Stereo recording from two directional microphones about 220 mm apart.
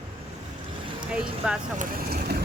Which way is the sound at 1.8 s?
40° right (ahead or behind).